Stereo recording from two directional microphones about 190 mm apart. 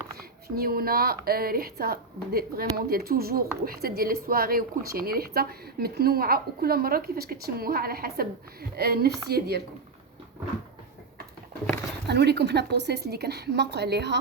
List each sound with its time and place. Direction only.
0.4 s a woman's voice: 50° right (ahead or behind)
12.0 s a woman's voice: 60° right (ahead or behind)